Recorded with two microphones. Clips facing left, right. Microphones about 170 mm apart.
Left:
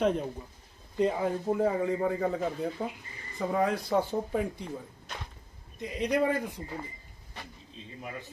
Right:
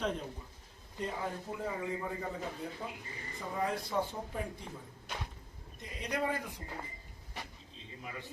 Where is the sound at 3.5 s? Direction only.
90° left.